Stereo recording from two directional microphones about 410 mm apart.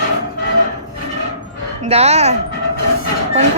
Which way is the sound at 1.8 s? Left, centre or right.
Centre.